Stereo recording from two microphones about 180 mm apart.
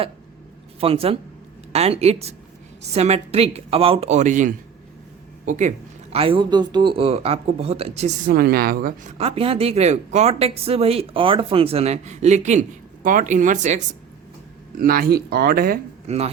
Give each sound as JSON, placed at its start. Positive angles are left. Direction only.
{"t": 0.8, "sound": "speech", "side_deg": -30}
{"t": 9.1, "sound": "speech", "side_deg": -35}
{"t": 14.8, "sound": "speech", "side_deg": -50}
{"t": 16.0, "sound": "speech", "side_deg": -35}